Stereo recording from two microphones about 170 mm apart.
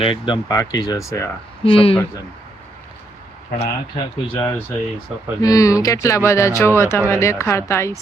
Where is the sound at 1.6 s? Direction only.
35° left (ahead or behind).